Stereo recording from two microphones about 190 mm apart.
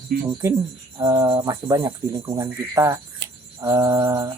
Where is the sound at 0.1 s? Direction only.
45° right (ahead or behind).